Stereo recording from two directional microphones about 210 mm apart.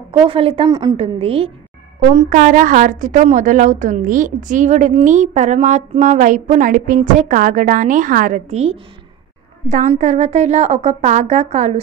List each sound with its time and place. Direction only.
0.1 s a woman's voice: 25° right (ahead or behind)
2.0 s a woman's voice: 40° right (ahead or behind)